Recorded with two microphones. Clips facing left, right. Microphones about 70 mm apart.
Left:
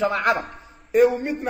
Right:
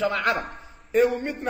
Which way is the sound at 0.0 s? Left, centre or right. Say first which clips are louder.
Left 3 dB; left.